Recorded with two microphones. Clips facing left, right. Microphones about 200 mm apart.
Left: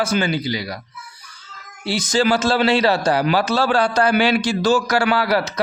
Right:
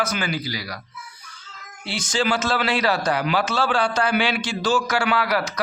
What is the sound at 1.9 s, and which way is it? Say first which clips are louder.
A man's voice: left 5 dB; 40° left (ahead or behind).